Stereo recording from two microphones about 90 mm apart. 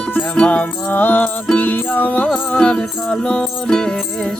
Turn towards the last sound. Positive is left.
turn(degrees=5)  # may be behind; listen again after turning